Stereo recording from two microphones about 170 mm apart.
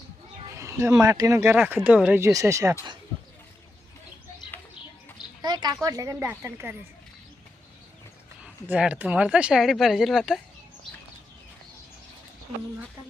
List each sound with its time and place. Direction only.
0.5 s speech: 15° right (ahead or behind)
5.4 s a woman's voice: 25° right (ahead or behind)
8.6 s speech: 10° right (ahead or behind)